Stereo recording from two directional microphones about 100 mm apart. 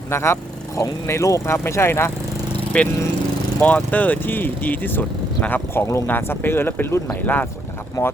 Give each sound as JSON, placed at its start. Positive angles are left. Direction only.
{"t": 0.1, "sound": "speech", "side_deg": 25}
{"t": 2.7, "sound": "speech", "side_deg": 10}
{"t": 8.0, "sound": "speech", "side_deg": 35}